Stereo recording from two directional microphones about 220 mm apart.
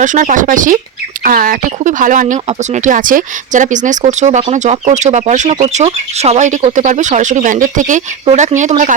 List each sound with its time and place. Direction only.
0.0 s speech: 35° right (ahead or behind)